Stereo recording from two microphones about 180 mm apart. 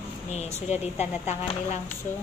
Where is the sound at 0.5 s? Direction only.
35° left (ahead or behind).